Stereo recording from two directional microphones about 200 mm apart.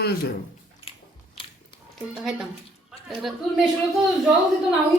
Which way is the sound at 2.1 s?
Centre (ahead or behind).